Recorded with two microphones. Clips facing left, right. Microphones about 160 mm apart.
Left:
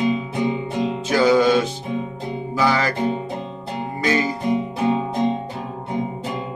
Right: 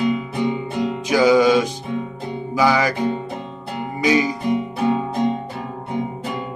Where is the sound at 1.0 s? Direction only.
15° right (ahead or behind).